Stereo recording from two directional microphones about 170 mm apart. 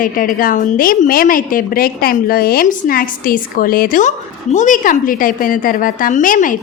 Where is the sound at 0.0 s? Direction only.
55° left (ahead or behind).